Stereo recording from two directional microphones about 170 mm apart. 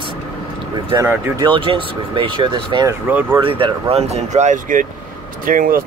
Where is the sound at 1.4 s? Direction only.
30° right (ahead or behind).